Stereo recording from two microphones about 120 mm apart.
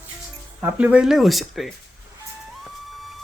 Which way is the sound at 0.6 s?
10° right (ahead or behind).